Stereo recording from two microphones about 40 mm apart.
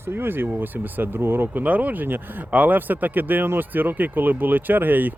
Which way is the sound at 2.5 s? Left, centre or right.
Right.